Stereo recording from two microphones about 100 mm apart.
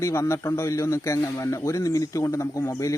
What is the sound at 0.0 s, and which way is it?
A man's voice, 30° left (ahead or behind).